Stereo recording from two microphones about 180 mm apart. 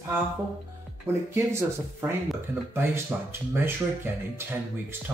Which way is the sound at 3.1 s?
10° right (ahead or behind).